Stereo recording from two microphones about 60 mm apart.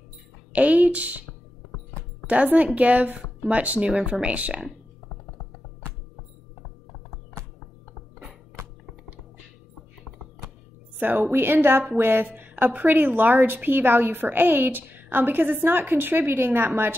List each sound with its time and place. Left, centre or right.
0.5 s speech: right
2.2 s speech: right
11.0 s a woman's voice: right